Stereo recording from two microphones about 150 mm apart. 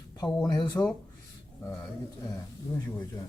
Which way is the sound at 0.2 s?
25° left (ahead or behind).